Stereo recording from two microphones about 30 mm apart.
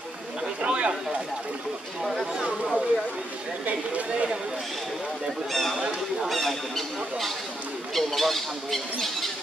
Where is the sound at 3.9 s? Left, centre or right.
Right.